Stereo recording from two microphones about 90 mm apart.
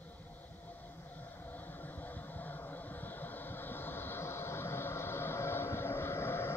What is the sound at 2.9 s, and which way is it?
Vehicle, 20° left (ahead or behind).